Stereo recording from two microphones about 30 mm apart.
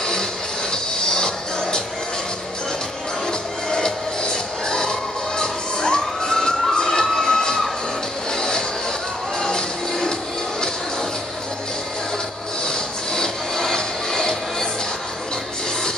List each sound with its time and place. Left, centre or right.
0.0 s music: left
3.7 s music: left
5.4 s children shouting: left
8.4 s music: left
12.6 s music: centre